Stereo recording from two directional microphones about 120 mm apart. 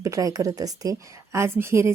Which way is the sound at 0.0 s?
30° right (ahead or behind).